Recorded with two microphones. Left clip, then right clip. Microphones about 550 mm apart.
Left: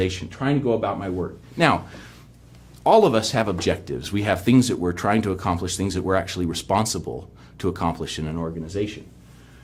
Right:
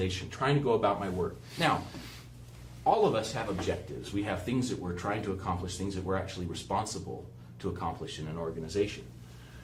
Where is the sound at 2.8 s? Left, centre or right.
Left.